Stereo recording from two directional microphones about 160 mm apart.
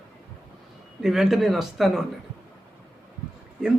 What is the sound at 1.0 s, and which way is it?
Speech, 5° right (ahead or behind).